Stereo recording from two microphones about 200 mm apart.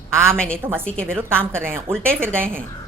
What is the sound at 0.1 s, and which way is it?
A woman's voice, 15° right (ahead or behind).